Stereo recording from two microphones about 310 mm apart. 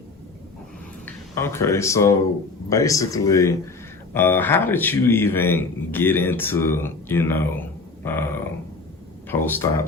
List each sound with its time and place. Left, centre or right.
1.0 s a man's voice: centre